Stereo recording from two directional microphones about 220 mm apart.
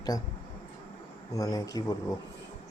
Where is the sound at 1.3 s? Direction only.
15° left (ahead or behind).